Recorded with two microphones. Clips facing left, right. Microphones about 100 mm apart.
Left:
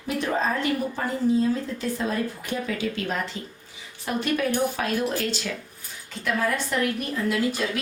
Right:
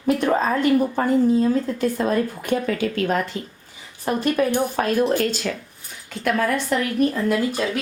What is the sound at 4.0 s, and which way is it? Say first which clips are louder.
A woman's voice: right 5 dB; 40° right (ahead or behind).